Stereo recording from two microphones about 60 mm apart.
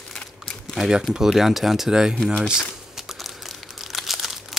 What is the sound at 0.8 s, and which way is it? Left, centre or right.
Speech, centre.